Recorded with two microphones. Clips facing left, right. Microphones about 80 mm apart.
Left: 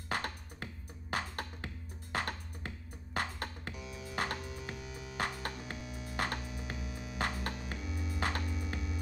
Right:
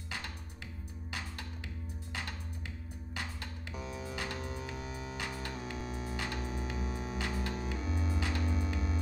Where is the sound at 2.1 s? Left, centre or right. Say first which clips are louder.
Left 6 dB; left.